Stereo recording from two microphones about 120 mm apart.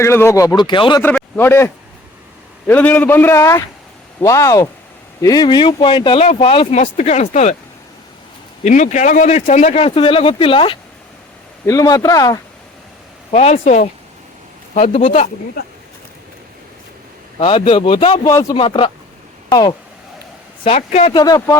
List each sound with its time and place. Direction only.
0.0 s speech: 20° left (ahead or behind); by 1.0 s 40° left (ahead or behind)
1.0 s a man's voice: 20° left (ahead or behind); by 6.7 s 50° left (ahead or behind)
6.7 s speech: 75° left (ahead or behind)
8.6 s speech: 85° left
9.8 s speech: 50° left (ahead or behind)
11.6 s speech: 30° left (ahead or behind)
13.3 s speech: 60° left (ahead or behind); by 15.3 s 80° left
17.4 s speech: 50° left (ahead or behind)
18.2 s speech: 25° left (ahead or behind)
18.5 s speech: 45° left (ahead or behind)
19.5 s speech: 30° left (ahead or behind)
20.7 s speech: 55° left (ahead or behind)
21.1 s speech: 30° left (ahead or behind)